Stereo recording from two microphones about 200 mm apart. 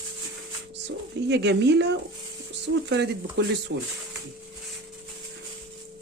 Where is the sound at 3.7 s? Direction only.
70° right (ahead or behind).